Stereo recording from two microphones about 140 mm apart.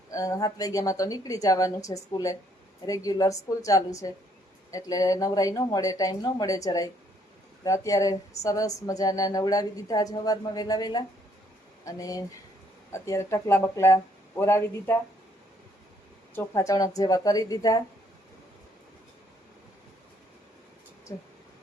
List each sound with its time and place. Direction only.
0.1 s a woman's voice: 25° left (ahead or behind)
16.3 s a woman's voice: 20° left (ahead or behind)
21.1 s a woman's voice: 25° left (ahead or behind)